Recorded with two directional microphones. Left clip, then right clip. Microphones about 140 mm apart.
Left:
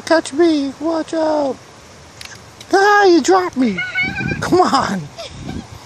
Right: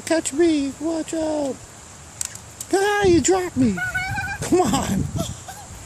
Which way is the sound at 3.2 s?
25° right (ahead or behind).